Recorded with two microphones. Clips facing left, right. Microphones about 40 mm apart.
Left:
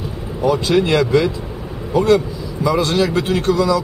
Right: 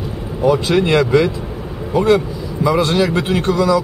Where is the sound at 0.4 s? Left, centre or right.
Centre.